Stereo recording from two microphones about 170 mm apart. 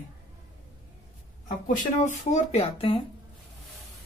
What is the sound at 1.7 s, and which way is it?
Speech, 50° left (ahead or behind).